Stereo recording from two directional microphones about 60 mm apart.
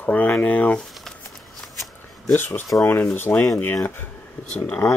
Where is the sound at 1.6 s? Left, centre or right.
Centre.